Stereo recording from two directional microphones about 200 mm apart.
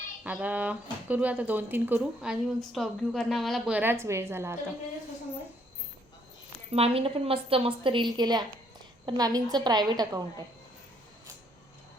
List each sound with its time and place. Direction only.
0.3 s speech: 5° right (ahead or behind)
6.7 s a woman's voice: 30° right (ahead or behind)